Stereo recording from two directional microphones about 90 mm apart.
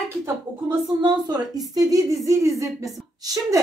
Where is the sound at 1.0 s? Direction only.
50° right (ahead or behind).